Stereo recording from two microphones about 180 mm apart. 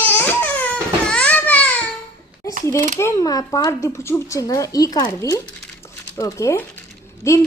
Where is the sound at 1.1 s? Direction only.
5° left (ahead or behind).